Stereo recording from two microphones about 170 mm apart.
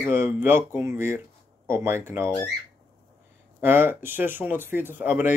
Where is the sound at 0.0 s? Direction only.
10° right (ahead or behind).